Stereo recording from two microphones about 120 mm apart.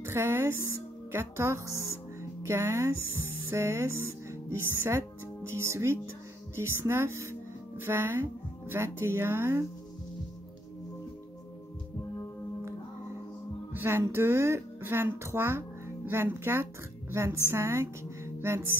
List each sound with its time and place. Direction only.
0.0 s speech: 20° right (ahead or behind)
13.7 s a woman's voice: 20° right (ahead or behind)